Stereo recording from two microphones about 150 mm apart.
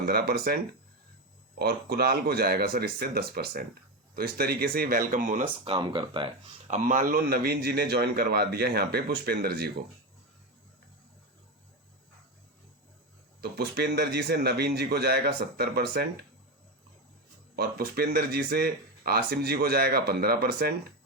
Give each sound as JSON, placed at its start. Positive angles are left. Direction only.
{"t": 0.0, "sound": "speech", "side_deg": -90}
{"t": 5.6, "sound": "speech", "side_deg": -30}
{"t": 6.7, "sound": "speech", "side_deg": -55}
{"t": 13.4, "sound": "speech", "side_deg": -90}
{"t": 17.6, "sound": "speech", "side_deg": -90}